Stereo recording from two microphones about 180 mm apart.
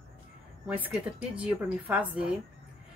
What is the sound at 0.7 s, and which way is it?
A woman's voice, 10° right (ahead or behind).